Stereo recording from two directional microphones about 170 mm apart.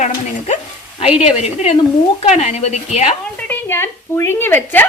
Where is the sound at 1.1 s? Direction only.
40° left (ahead or behind).